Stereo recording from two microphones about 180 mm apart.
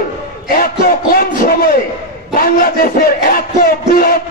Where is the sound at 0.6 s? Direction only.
55° left (ahead or behind).